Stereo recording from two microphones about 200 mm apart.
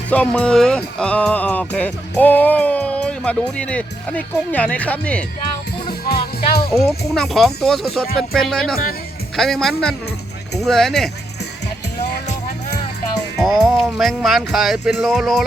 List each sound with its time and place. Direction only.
0.1 s speech: 5° left (ahead or behind)
5.9 s music: 50° left (ahead or behind)
6.7 s speech: centre (ahead or behind)
13.4 s speech: centre (ahead or behind)